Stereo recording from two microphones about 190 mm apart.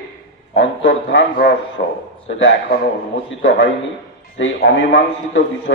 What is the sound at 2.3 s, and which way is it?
A man's voice, 80° left.